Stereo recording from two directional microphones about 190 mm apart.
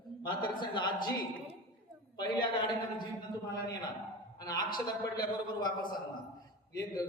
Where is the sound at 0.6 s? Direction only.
25° left (ahead or behind).